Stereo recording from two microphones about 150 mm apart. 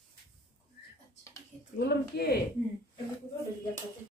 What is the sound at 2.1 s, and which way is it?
Speech, 90° left.